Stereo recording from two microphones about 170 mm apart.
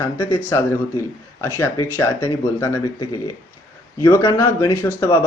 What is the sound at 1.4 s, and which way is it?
Speech, 15° left (ahead or behind).